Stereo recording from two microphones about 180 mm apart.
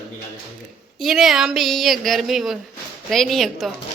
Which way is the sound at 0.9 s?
Centre (ahead or behind).